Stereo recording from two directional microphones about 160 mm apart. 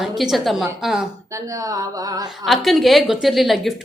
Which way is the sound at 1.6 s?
20° right (ahead or behind).